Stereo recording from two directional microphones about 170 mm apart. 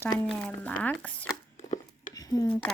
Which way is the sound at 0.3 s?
10° left (ahead or behind).